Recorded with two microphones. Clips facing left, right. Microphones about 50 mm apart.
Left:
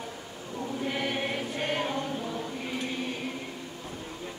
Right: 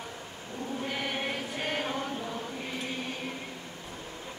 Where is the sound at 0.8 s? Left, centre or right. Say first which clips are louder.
Left 3 dB; centre.